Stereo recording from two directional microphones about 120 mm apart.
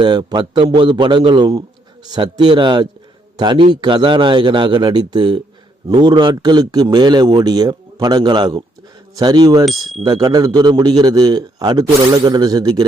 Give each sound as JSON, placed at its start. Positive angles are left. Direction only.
{"t": 0.0, "sound": "a man's voice", "side_deg": -40}